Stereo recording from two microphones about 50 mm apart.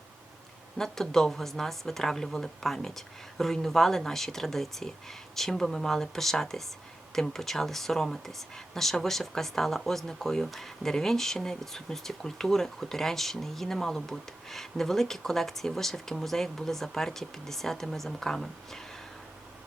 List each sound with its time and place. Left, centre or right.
0.8 s speech: centre